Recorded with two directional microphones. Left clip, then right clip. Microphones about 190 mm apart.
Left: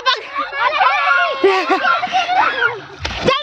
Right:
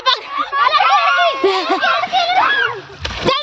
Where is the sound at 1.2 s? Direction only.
Centre (ahead or behind).